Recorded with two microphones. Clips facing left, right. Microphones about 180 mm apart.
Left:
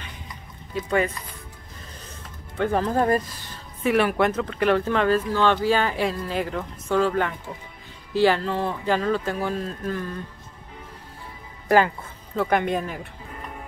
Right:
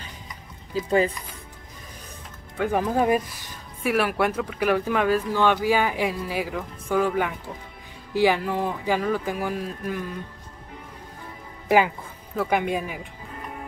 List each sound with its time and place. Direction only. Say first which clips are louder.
0.7 s speech: right 2 dB; 30° right (ahead or behind)
2.5 s speech: left 1 dB; 10° right (ahead or behind)
12.4 s speech: left 1 dB; 10° right (ahead or behind)